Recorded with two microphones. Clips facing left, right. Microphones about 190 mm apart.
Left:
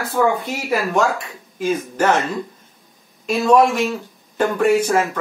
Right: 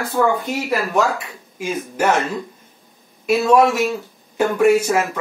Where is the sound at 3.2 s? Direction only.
5° right (ahead or behind).